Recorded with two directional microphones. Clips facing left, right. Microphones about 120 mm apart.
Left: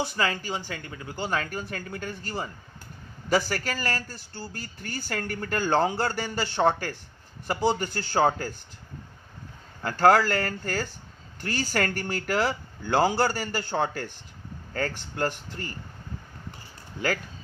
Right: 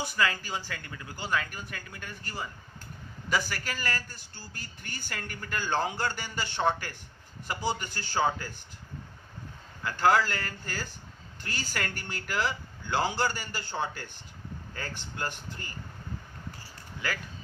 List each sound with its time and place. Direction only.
0.0 s speech: 30° left (ahead or behind); by 8.4 s 45° left (ahead or behind)
9.8 s speech: 45° left (ahead or behind)
11.4 s speech: 40° left (ahead or behind)